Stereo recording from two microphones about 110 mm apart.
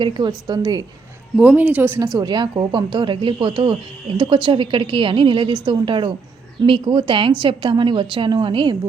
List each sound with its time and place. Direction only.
0.0 s a woman's voice: 40° right (ahead or behind)
1.4 s speech: 10° right (ahead or behind)
2.1 s a woman's voice: 40° right (ahead or behind)